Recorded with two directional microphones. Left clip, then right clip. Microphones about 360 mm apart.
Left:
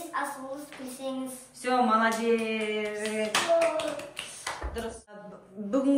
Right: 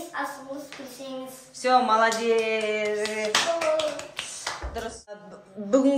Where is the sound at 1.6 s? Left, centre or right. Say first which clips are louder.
Right 4 dB; centre.